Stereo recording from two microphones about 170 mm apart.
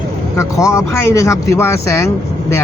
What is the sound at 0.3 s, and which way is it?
Speech, 15° left (ahead or behind).